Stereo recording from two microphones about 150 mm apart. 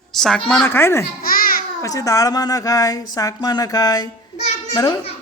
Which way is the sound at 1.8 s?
20° left (ahead or behind).